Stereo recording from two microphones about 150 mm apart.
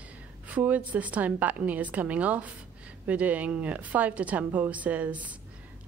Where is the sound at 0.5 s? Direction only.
10° right (ahead or behind).